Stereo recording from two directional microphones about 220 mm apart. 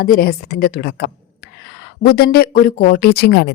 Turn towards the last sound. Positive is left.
turn(degrees=50)  # may be behind; listen again after turning